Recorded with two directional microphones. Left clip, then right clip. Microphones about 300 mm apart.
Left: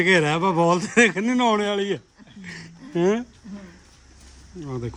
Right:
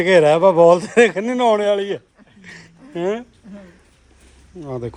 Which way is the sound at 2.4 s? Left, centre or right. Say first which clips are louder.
Even; centre.